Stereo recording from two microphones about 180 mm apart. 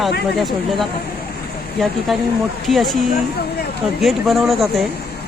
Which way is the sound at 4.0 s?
Centre (ahead or behind).